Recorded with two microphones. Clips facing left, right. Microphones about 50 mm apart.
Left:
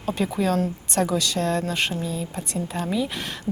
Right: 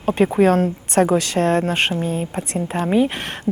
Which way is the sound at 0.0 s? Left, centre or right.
Right.